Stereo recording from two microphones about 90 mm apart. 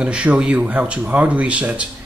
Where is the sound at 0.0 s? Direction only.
10° right (ahead or behind).